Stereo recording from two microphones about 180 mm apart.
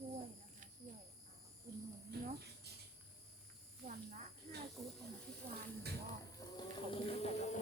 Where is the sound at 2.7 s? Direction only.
65° right (ahead or behind).